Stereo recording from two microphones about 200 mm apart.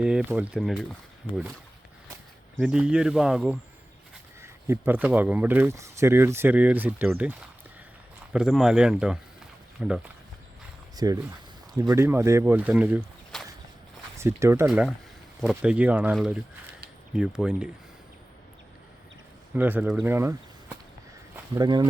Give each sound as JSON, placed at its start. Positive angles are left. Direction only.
{"t": 0.0, "sound": "speech", "side_deg": -5}
{"t": 2.6, "sound": "speech", "side_deg": -5}
{"t": 10.9, "sound": "speech", "side_deg": -20}
{"t": 13.3, "sound": "a sound", "side_deg": 0}
{"t": 14.2, "sound": "speech", "side_deg": -15}
{"t": 14.7, "sound": "speech", "side_deg": 0}
{"t": 19.5, "sound": "speech", "side_deg": -10}